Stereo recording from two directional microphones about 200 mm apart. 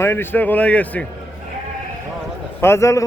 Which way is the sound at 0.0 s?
10° left (ahead or behind).